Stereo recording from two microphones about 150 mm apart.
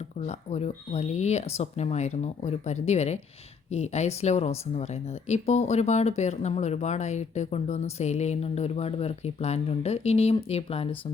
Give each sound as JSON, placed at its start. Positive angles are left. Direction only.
{"t": 0.3, "sound": "speech", "side_deg": 50}